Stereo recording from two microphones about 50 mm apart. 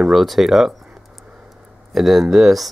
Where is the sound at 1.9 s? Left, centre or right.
Centre.